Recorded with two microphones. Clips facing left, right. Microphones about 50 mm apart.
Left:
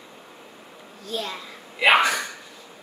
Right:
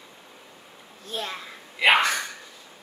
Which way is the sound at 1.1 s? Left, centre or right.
Right.